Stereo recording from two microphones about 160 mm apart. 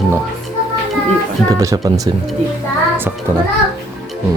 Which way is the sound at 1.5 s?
20° right (ahead or behind).